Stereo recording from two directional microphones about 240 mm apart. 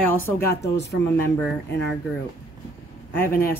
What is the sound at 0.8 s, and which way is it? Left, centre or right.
Speech, left.